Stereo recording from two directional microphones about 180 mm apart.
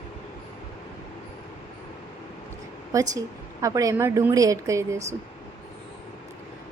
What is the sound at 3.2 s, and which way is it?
Speech, 20° right (ahead or behind).